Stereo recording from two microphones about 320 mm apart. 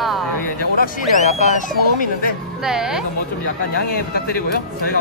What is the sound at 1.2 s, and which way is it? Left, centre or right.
Speech, left.